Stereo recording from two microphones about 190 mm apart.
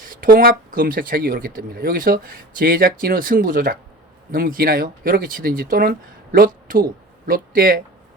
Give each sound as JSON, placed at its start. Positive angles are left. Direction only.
{"t": 0.1, "sound": "speech", "side_deg": -50}